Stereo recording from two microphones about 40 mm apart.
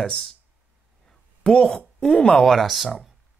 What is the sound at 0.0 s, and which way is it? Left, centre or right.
Speech, centre.